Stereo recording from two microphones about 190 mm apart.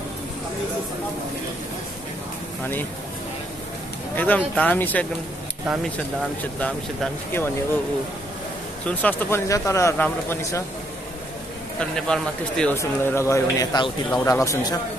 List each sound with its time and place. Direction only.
4.2 s speech: 10° left (ahead or behind)
6.6 s speech: 5° left (ahead or behind)
8.8 s speech: 10° left (ahead or behind)
11.8 s speech: 5° left (ahead or behind)